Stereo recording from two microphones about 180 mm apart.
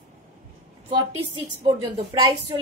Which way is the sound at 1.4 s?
25° right (ahead or behind).